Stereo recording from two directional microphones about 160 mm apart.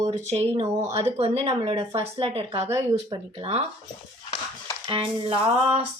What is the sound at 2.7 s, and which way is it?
Speech, 15° right (ahead or behind).